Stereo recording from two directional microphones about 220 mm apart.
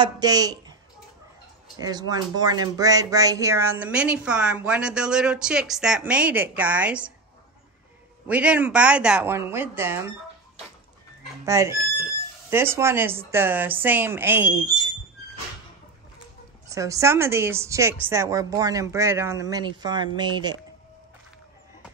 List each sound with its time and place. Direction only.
0.0 s speech: 15° right (ahead or behind)
1.8 s speech: 15° right (ahead or behind)
8.3 s a woman's voice: 5° right (ahead or behind)
11.4 s a woman's voice: 15° right (ahead or behind)
14.7 s a sound: 15° right (ahead or behind)
16.6 s a woman's voice: 15° right (ahead or behind)